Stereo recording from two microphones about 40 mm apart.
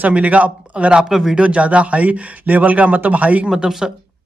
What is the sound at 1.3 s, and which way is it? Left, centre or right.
Speech, right.